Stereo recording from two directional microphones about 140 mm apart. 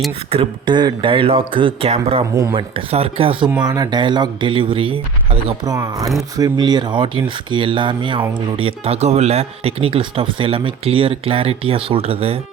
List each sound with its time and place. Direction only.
0.3 s speech: 40° right (ahead or behind)
3.6 s speech: 30° right (ahead or behind)
5.6 s speech: 25° right (ahead or behind); by 12.4 s 45° right (ahead or behind)